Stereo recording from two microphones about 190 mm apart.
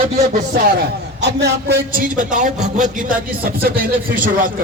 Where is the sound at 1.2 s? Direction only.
60° right (ahead or behind).